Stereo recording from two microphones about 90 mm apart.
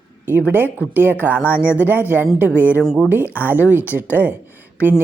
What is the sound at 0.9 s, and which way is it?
Speech, 20° right (ahead or behind).